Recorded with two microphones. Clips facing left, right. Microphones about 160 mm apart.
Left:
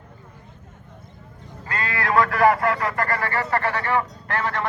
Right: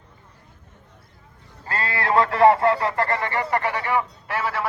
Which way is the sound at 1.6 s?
30° right (ahead or behind).